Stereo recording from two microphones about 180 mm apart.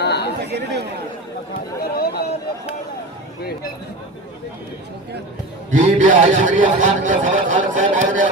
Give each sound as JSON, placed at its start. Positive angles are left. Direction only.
{"t": 0.0, "sound": "chatter", "side_deg": 65}
{"t": 0.5, "sound": "speech", "side_deg": -65}
{"t": 1.8, "sound": "a sound", "side_deg": 60}
{"t": 5.7, "sound": "a man's voice", "side_deg": -45}